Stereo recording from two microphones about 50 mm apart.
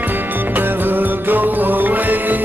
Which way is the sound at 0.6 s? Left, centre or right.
Right.